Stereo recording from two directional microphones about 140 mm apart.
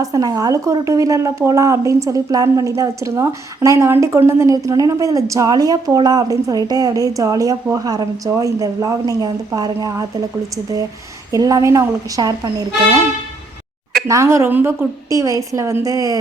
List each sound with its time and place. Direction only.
0.0 s a woman's voice: 25° right (ahead or behind)
11.3 s a woman's voice: 25° right (ahead or behind)
14.1 s a woman's voice: 20° right (ahead or behind)